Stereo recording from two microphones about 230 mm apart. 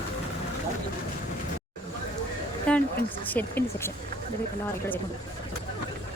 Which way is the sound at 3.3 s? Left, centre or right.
Centre.